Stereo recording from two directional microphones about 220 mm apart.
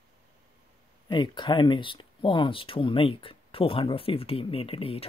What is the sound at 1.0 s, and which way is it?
Speech, 20° left (ahead or behind).